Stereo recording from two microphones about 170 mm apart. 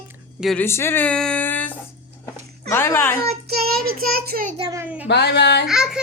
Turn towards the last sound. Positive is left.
turn(degrees=-5)  # may be behind; listen again after turning